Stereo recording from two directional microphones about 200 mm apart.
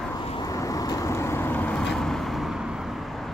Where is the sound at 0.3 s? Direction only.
20° left (ahead or behind).